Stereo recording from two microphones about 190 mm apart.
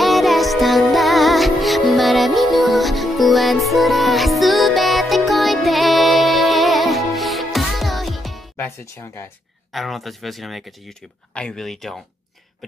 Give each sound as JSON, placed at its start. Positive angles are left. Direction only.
{"t": 0.0, "sound": "music", "side_deg": 0}
{"t": 8.5, "sound": "speech", "side_deg": 15}
{"t": 9.7, "sound": "speech", "side_deg": 0}